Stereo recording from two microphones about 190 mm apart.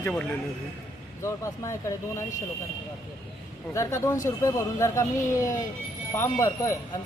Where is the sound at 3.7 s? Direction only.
15° left (ahead or behind).